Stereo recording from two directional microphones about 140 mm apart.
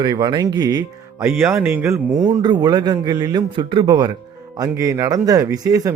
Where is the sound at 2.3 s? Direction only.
30° right (ahead or behind).